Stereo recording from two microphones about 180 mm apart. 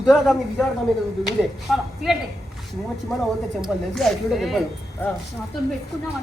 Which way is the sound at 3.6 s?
Centre (ahead or behind).